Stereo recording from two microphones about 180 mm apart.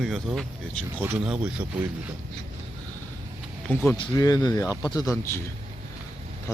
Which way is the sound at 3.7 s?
10° left (ahead or behind).